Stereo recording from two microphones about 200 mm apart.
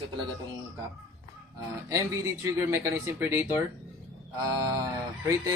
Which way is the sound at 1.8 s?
15° right (ahead or behind).